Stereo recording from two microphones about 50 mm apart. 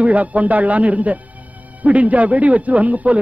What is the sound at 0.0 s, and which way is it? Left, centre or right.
Speech, right.